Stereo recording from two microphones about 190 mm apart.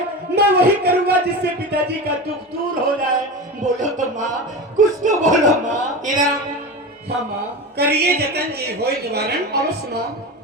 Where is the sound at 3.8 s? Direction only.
40° right (ahead or behind).